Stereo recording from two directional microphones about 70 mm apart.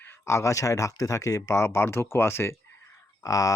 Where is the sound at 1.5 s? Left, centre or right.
Left.